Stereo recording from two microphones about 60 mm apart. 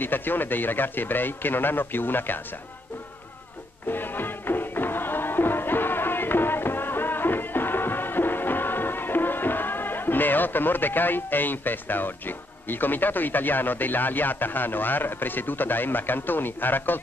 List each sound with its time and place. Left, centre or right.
0.0 s speech: left
3.9 s music: left